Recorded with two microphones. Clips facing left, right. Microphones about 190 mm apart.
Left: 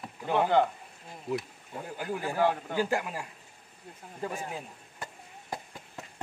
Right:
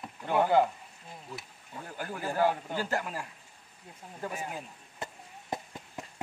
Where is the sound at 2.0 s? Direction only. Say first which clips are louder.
Left 1 dB; 15° left (ahead or behind).